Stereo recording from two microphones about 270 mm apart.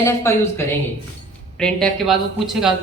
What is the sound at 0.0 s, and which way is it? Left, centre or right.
A woman's voice, centre.